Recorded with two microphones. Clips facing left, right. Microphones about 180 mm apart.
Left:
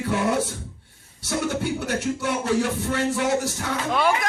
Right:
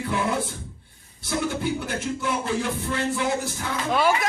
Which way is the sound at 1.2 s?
80° left.